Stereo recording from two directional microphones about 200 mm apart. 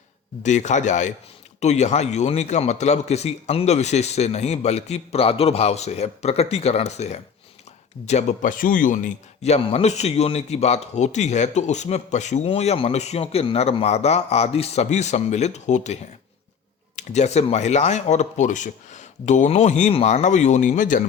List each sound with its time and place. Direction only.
0.4 s a man's voice: 35° left (ahead or behind)